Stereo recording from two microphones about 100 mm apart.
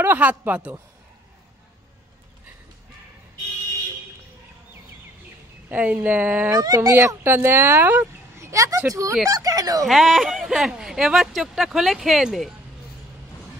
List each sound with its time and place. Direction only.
0.0 s speech: 15° right (ahead or behind)
5.7 s speech: 15° right (ahead or behind)
6.5 s speech: 35° right (ahead or behind); by 8.1 s 15° right (ahead or behind)
8.4 s speech: 30° right (ahead or behind)
9.8 s speech: centre (ahead or behind)